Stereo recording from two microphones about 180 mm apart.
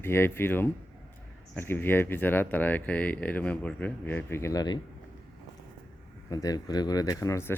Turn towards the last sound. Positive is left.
turn(degrees=15)  # may be behind; listen again after turning